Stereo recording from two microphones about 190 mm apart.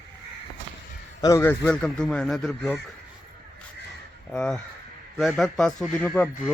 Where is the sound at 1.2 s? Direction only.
15° left (ahead or behind).